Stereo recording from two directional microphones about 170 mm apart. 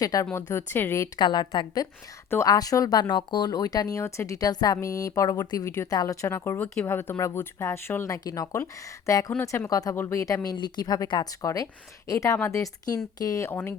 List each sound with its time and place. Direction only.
0.0 s speech: 20° left (ahead or behind)